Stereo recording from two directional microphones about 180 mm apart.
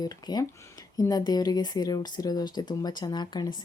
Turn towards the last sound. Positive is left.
turn(degrees=25)  # may be behind; listen again after turning